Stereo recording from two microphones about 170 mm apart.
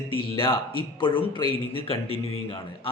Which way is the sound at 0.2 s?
30° left (ahead or behind).